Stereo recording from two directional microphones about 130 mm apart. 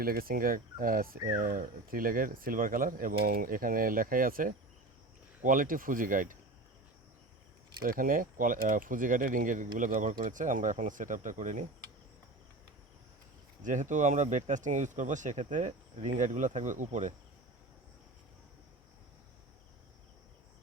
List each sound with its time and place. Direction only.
0.3 s speech: 90° right
7.8 s speech: 90° right; by 11.6 s 70° right (ahead or behind)
13.6 s speech: 75° right (ahead or behind)